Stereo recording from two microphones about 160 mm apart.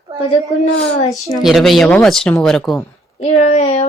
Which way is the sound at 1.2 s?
Centre (ahead or behind).